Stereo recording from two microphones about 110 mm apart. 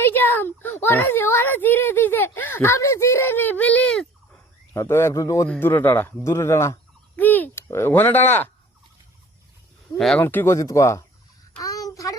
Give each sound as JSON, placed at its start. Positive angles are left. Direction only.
{"t": 0.0, "sound": "speech", "side_deg": 20}
{"t": 4.7, "sound": "speech", "side_deg": 25}
{"t": 5.5, "sound": "speech", "side_deg": 20}
{"t": 10.2, "sound": "speech", "side_deg": 20}
{"t": 11.6, "sound": "child singing", "side_deg": 35}